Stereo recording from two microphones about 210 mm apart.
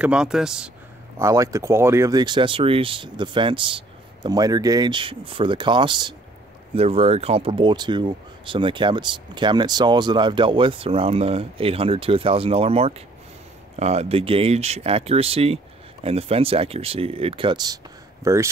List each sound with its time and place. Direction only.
0.0 s a man's voice: 5° right (ahead or behind)
1.1 s speech: 15° right (ahead or behind)